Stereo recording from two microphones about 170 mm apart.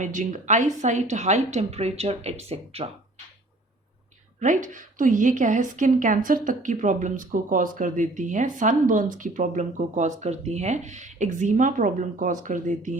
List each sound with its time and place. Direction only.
0.0 s a woman's voice: 50° right (ahead or behind)
4.4 s a woman's voice: 50° right (ahead or behind)